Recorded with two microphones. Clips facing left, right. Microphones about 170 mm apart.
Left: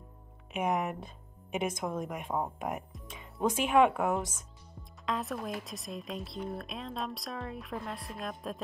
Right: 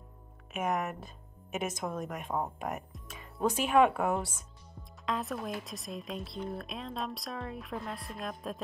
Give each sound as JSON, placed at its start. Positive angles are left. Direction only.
{"t": 0.6, "sound": "a woman's voice", "side_deg": 15}